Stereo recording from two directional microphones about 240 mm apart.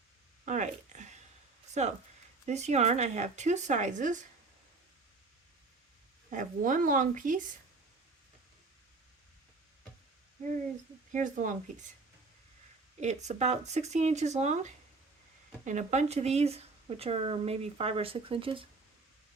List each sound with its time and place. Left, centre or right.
0.4 s a sound: right
2.5 s speech: right
6.3 s a woman's voice: right
11.1 s a woman's voice: right
13.0 s speech: right